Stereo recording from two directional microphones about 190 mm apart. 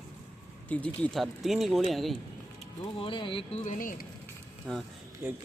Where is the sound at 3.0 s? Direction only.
25° left (ahead or behind); by 4.0 s 45° left (ahead or behind).